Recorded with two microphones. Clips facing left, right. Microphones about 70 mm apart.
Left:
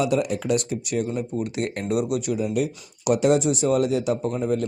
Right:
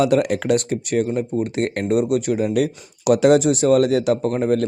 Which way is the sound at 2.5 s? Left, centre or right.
Right.